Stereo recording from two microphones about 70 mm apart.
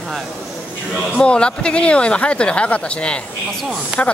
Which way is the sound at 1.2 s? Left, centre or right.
Centre.